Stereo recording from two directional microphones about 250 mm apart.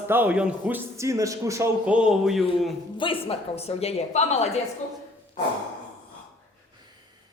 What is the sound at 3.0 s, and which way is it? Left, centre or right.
A woman's voice, left.